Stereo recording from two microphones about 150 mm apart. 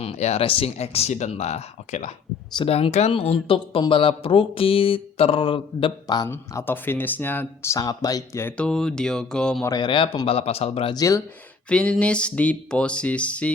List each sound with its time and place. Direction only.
0.0 s speech: 45° left (ahead or behind)
6.2 s speech: 15° left (ahead or behind)
9.6 s speech: 30° left (ahead or behind)
10.9 s speech: 20° left (ahead or behind)
11.7 s speech: 5° left (ahead or behind)